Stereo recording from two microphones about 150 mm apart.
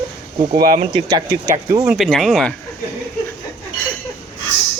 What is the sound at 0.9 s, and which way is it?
Speech, 25° right (ahead or behind).